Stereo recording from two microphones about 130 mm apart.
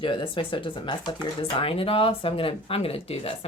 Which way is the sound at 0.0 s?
40° left (ahead or behind).